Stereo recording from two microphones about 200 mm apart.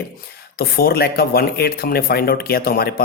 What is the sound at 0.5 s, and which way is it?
Speech, 50° left (ahead or behind).